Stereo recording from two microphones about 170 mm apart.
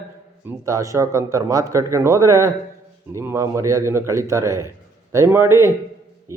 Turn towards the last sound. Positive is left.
turn(degrees=-15)  # may be behind; listen again after turning